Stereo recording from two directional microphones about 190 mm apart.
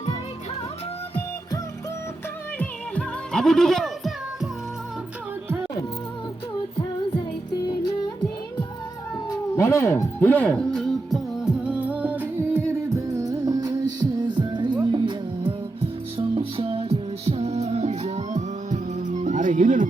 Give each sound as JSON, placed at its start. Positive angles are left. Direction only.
{"t": 2.6, "sound": "music", "side_deg": 5}
{"t": 7.7, "sound": "music", "side_deg": 20}
{"t": 9.3, "sound": "music", "side_deg": 15}